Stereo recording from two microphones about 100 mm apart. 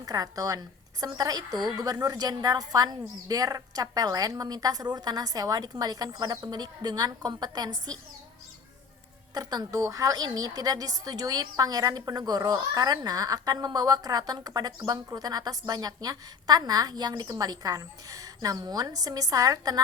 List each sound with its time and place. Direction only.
0.0 s a woman's voice: 40° right (ahead or behind)
9.3 s a woman's voice: 40° right (ahead or behind)